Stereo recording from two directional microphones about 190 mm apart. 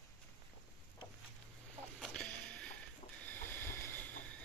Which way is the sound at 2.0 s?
5° left (ahead or behind).